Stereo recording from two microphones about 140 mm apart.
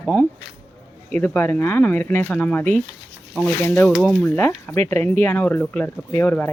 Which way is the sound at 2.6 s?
60° right (ahead or behind).